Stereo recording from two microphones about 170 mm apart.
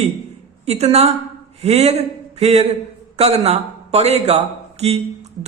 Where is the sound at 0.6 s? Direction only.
40° right (ahead or behind).